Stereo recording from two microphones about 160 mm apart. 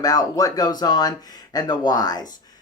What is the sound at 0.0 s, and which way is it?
Speech, 25° left (ahead or behind).